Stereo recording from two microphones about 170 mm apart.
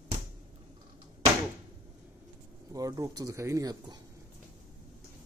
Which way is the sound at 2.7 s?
20° right (ahead or behind).